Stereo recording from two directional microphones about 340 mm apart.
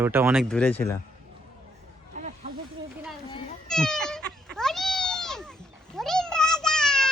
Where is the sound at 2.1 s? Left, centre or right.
Right.